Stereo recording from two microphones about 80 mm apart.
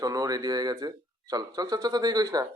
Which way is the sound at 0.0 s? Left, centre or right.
Right.